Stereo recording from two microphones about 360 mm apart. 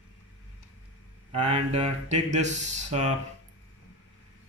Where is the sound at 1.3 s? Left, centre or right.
Centre.